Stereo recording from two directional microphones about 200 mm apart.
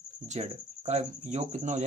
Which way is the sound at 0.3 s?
35° right (ahead or behind).